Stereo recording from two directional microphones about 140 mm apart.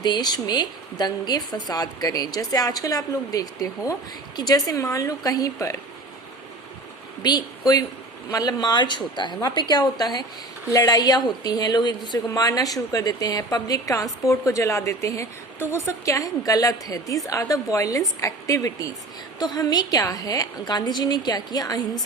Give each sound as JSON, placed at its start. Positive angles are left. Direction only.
{"t": 0.0, "sound": "speech", "side_deg": 30}
{"t": 7.2, "sound": "speech", "side_deg": 30}